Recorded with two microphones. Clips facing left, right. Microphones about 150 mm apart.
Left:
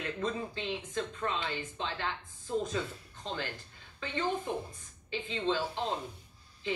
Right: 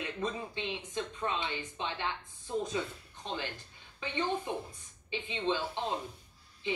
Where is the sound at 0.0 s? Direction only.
15° right (ahead or behind).